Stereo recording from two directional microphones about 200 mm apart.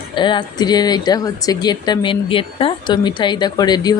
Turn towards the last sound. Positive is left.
turn(degrees=20)  # may be behind; listen again after turning